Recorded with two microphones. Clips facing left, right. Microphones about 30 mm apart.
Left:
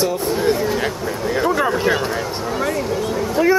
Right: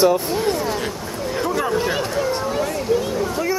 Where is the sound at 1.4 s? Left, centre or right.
Centre.